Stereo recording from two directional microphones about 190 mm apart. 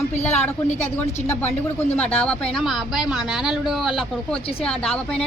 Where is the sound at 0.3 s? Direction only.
10° left (ahead or behind).